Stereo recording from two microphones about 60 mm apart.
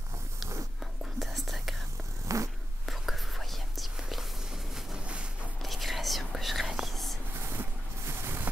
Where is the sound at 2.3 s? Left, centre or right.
Right.